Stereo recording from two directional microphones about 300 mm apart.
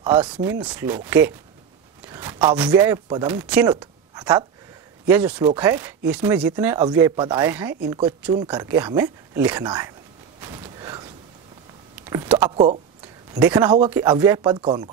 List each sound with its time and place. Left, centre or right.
0.0 s speech: centre
10.4 s a sound: centre
12.1 s speech: centre
13.3 s speech: centre